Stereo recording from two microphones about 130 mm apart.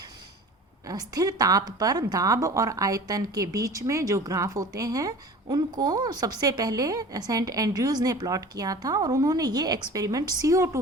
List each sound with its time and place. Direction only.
0.9 s a woman's voice: 30° right (ahead or behind)